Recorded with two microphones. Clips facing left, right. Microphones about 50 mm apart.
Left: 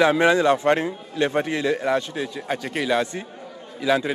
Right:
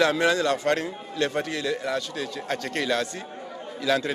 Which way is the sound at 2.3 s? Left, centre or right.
Centre.